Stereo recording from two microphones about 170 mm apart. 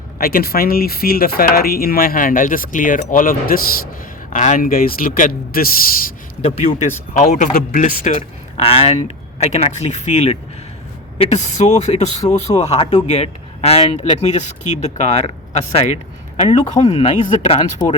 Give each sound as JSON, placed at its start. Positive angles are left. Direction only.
{"t": 0.2, "sound": "speech", "side_deg": 60}
{"t": 6.4, "sound": "speech", "side_deg": 40}